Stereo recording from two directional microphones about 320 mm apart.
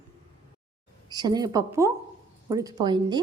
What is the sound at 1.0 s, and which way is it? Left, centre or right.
A woman's voice, centre.